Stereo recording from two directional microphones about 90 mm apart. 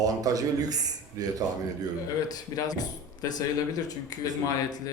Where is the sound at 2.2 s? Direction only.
45° left (ahead or behind).